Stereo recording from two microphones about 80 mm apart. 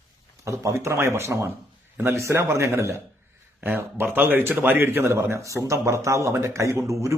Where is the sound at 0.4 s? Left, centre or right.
Right.